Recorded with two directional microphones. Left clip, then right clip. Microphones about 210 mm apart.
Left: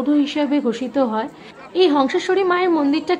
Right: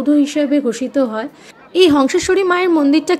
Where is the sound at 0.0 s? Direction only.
15° right (ahead or behind).